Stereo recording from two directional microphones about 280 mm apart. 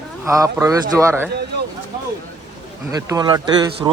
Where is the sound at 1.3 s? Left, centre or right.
Right.